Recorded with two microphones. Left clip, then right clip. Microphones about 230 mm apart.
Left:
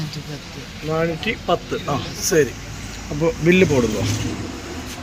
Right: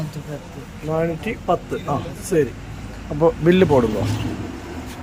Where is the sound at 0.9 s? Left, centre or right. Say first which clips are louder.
Left 1 dB; centre.